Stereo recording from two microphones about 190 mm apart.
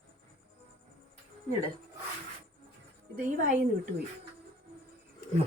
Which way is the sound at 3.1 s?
45° right (ahead or behind).